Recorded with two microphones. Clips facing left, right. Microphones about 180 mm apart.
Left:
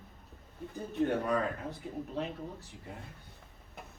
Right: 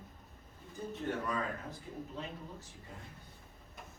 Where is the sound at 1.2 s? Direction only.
65° left (ahead or behind).